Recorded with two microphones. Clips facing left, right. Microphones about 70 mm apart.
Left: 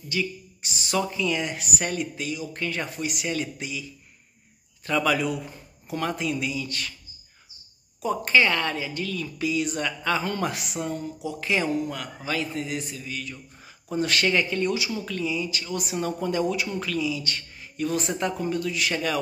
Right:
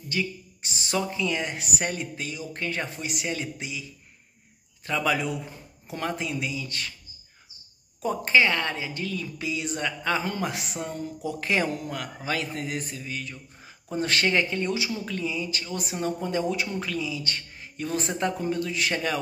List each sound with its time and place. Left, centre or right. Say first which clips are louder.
0.1 s speech: left 1 dB; right
4.8 s speech: left 2 dB; right
8.2 s a man's voice: even; centre
11.2 s a man's voice: even; right